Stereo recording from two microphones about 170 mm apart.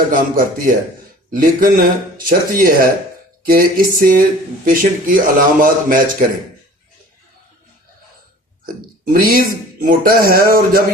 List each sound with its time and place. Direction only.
0.1 s speech: 55° right (ahead or behind)
8.6 s speech: 60° right (ahead or behind)